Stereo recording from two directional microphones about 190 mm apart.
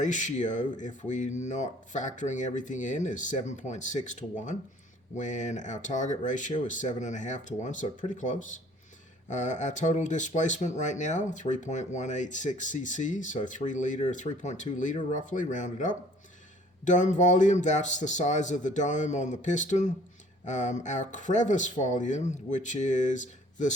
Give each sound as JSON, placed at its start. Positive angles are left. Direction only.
{"t": 0.0, "sound": "speech", "side_deg": 40}